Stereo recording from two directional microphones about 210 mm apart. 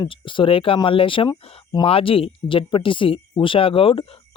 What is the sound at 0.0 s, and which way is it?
Speech, 25° left (ahead or behind).